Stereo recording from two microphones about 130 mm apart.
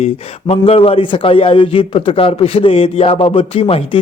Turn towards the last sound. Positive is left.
turn(degrees=45)  # may be behind; listen again after turning